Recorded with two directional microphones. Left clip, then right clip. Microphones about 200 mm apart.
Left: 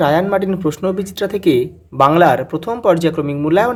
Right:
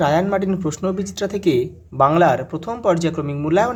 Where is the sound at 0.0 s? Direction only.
10° left (ahead or behind).